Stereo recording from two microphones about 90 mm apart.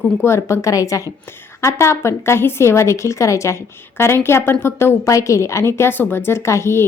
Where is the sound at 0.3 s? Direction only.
30° left (ahead or behind).